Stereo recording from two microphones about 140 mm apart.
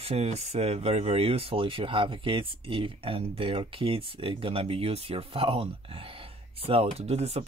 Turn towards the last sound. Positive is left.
turn(degrees=-50)  # may be behind; listen again after turning